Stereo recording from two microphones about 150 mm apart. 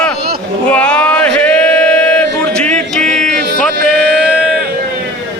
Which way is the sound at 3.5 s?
90° right.